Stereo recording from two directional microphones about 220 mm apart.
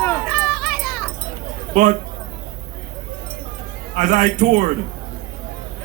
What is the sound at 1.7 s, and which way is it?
Speech, 35° right (ahead or behind).